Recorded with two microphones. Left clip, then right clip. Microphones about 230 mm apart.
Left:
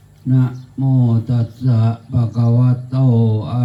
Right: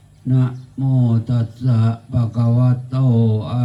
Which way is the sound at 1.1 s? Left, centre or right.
Centre.